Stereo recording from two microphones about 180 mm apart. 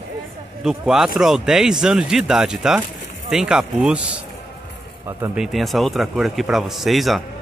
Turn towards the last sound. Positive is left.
turn(degrees=0)  # may be behind; listen again after turning